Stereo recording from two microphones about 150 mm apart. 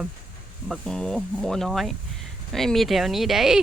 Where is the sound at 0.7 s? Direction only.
5° left (ahead or behind).